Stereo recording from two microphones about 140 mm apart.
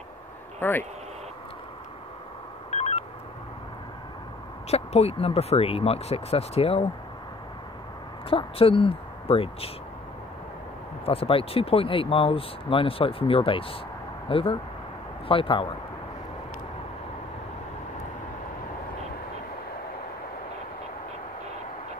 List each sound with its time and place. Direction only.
0.6 s speech: 15° left (ahead or behind)
2.7 s telephone dialing: 50° left (ahead or behind)
4.6 s speech: 50° left (ahead or behind)
8.3 s speech: 40° left (ahead or behind)
11.1 s speech: 40° left (ahead or behind)